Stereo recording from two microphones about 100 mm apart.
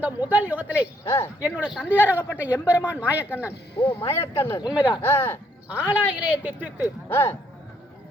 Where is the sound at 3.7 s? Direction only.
65° left (ahead or behind).